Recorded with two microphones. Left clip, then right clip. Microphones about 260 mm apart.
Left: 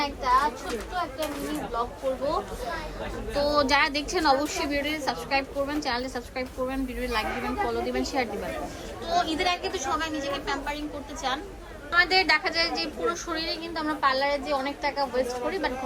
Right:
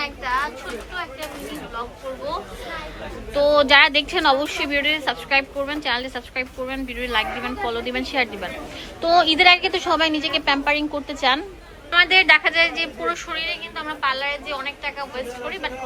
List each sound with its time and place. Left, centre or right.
0.3 s a sound: centre
3.3 s a woman's voice: centre
9.0 s a woman's voice: centre